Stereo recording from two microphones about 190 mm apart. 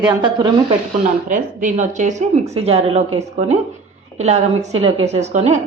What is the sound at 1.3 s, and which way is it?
Speech, 40° right (ahead or behind).